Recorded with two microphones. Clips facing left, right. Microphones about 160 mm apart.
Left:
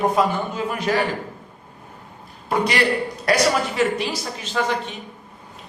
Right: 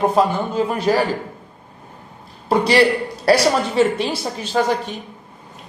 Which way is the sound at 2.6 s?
30° right (ahead or behind).